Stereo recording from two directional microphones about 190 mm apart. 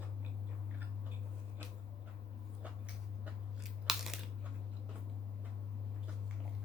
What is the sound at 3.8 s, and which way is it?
Crunch, centre (ahead or behind).